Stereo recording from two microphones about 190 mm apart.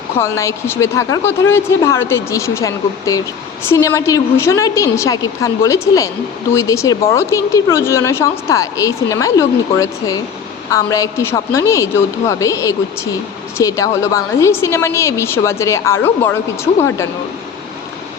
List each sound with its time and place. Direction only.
0.2 s a woman's voice: 15° left (ahead or behind)